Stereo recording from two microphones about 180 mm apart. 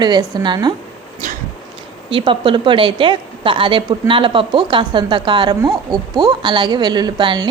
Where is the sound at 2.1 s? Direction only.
30° right (ahead or behind).